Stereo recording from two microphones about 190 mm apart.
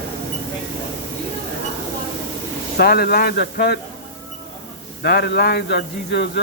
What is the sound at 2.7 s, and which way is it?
Speech, 55° left (ahead or behind).